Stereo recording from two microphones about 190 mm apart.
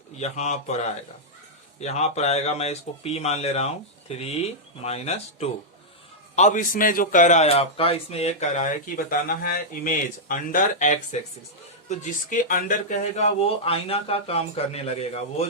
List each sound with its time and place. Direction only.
0.2 s a man's voice: 35° left (ahead or behind)
1.8 s a man's voice: 35° left (ahead or behind)